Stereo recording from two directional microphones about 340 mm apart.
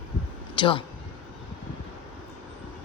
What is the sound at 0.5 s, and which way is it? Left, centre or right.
Speech, centre.